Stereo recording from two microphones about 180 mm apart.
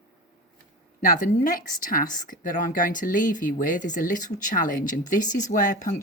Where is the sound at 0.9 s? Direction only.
50° left (ahead or behind).